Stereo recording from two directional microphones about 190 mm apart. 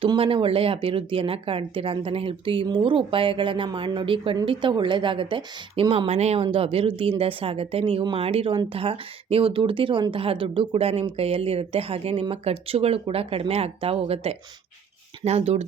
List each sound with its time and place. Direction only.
0.0 s speech: 30° right (ahead or behind)